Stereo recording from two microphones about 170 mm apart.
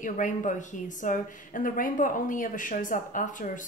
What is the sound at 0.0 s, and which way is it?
A woman's voice, 50° left (ahead or behind).